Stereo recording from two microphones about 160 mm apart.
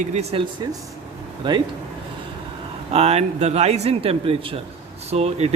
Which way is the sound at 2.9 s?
40° right (ahead or behind).